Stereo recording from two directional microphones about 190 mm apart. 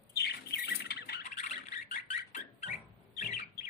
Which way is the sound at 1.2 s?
40° left (ahead or behind).